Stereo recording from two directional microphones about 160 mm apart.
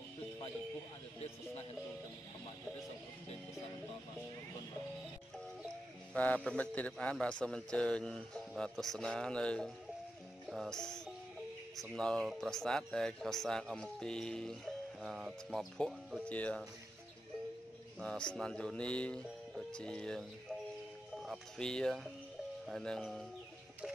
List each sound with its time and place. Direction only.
6.1 s speech: 10° left (ahead or behind)
18.0 s speech: 5° left (ahead or behind)